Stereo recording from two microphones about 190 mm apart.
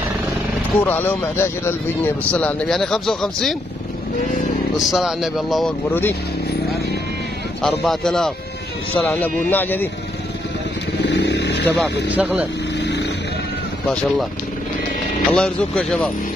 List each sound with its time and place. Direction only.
0.7 s speech: 10° left (ahead or behind)
4.7 s speech: centre (ahead or behind)
5.9 s speech: 10° left (ahead or behind)
7.6 s speech: centre (ahead or behind)
11.1 s vehicle: 65° left (ahead or behind)
12.1 s speech: 5° right (ahead or behind)
12.8 s vehicle: 65° left (ahead or behind)
15.3 s speech: 5° left (ahead or behind)